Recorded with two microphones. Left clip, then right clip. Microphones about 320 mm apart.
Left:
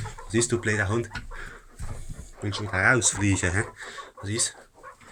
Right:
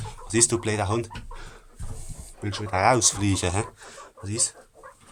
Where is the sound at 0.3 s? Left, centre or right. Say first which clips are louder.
Right 1 dB; centre.